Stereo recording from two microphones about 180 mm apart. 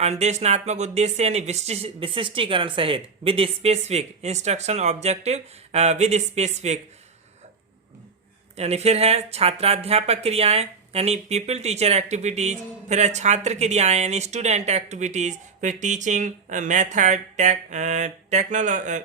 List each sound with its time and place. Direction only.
0.0 s speech: 35° right (ahead or behind)
8.5 s speech: 35° right (ahead or behind)